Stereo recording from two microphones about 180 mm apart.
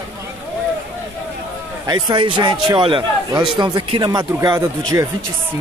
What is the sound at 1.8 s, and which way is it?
A man's voice, 20° right (ahead or behind).